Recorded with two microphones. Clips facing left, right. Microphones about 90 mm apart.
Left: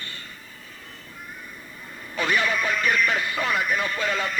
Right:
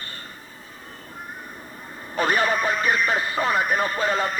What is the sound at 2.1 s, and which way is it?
Speech, 40° right (ahead or behind).